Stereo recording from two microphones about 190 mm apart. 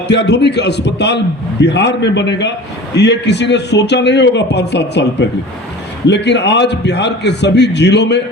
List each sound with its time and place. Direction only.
0.1 s a man's voice: 65° left (ahead or behind)
6.1 s a man's voice: 65° left (ahead or behind)